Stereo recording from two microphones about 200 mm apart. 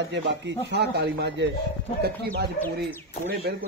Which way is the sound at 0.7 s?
55° right (ahead or behind).